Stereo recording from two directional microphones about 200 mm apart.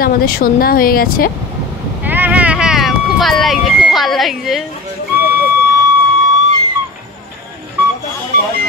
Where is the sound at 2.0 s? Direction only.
10° right (ahead or behind).